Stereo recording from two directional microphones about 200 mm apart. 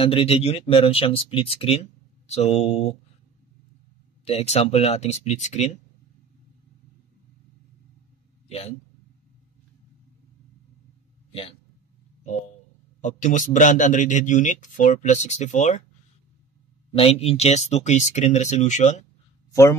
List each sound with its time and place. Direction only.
0.0 s a man's voice: 25° left (ahead or behind)
4.2 s a man's voice: 30° left (ahead or behind)
8.5 s a man's voice: 30° left (ahead or behind)
13.0 s a man's voice: 40° left (ahead or behind)
16.9 s a man's voice: 30° left (ahead or behind)